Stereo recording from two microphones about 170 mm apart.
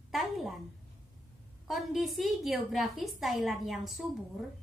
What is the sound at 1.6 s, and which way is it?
A woman's voice, centre (ahead or behind).